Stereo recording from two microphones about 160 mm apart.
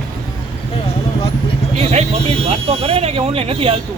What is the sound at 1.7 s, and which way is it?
Speech, 40° right (ahead or behind).